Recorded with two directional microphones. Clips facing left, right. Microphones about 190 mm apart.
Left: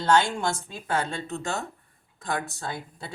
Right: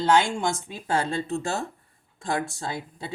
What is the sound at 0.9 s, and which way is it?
Speech, 30° right (ahead or behind).